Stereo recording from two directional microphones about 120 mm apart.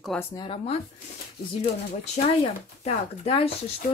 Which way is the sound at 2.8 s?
55° left (ahead or behind).